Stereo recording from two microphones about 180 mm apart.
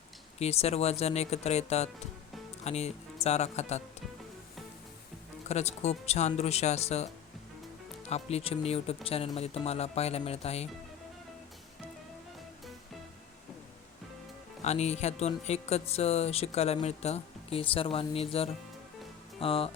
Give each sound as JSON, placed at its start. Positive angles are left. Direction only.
{"t": 0.3, "sound": "speech", "side_deg": 35}
{"t": 5.5, "sound": "speech", "side_deg": 40}
{"t": 14.6, "sound": "speech", "side_deg": 40}